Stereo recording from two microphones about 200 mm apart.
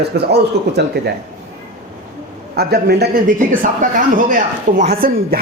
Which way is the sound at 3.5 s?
40° right (ahead or behind).